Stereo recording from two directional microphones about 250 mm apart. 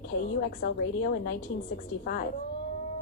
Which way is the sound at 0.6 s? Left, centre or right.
Left.